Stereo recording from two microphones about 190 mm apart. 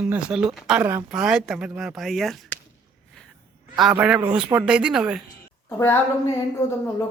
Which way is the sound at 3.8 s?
5° right (ahead or behind).